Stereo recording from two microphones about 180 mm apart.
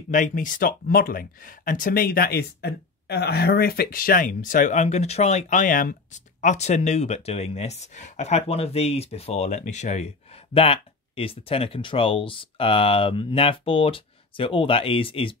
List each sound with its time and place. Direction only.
0.1 s speech: 45° left (ahead or behind); by 15.3 s 30° left (ahead or behind)